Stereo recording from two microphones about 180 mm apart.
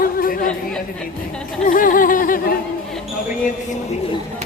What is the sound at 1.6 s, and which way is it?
Speech, 50° left (ahead or behind).